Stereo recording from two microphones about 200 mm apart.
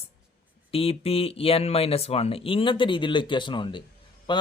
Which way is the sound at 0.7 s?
30° left (ahead or behind).